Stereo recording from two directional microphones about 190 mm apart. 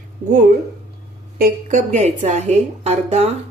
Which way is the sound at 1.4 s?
40° right (ahead or behind).